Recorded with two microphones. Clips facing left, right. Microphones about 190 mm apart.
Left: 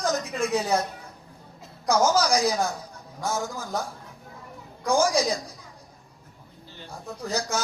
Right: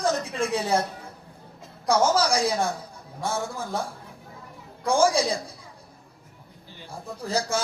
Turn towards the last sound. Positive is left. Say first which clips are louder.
# right 2 dB
turn(degrees=-30)  # may be behind; listen again after turning